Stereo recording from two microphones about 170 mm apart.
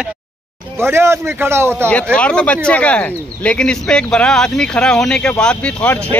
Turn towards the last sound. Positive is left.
turn(degrees=10)  # may be behind; listen again after turning